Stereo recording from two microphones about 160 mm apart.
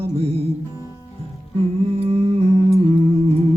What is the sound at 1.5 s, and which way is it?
Humming, 40° right (ahead or behind).